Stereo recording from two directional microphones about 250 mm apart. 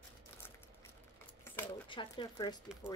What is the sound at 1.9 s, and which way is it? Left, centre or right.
Speech, centre.